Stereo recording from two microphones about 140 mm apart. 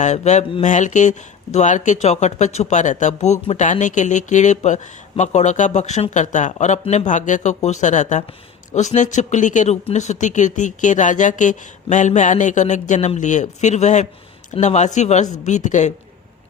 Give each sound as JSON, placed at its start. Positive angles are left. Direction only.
{"t": 0.0, "sound": "speech", "side_deg": 60}